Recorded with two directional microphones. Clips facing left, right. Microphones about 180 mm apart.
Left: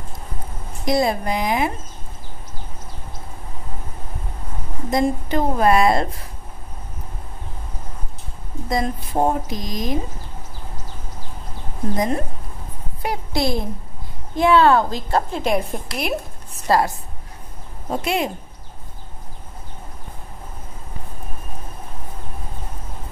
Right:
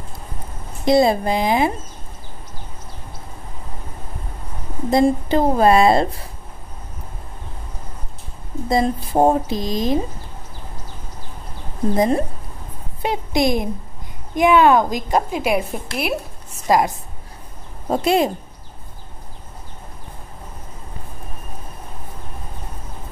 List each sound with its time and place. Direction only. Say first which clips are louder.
0.8 s speech: right 5 dB; 25° right (ahead or behind)
4.9 s speech: right 4 dB; 30° right (ahead or behind)
8.6 s speech: right 4 dB; 30° right (ahead or behind)
11.9 s a woman's voice: right 4 dB; 30° right (ahead or behind); by 16.2 s centre (ahead or behind)
16.6 s a woman's voice: right 1 dB; 15° right (ahead or behind)
17.8 s speech: right 5 dB; 35° right (ahead or behind)